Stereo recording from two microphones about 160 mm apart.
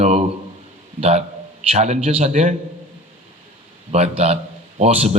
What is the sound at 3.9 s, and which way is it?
A man's voice, 40° right (ahead or behind).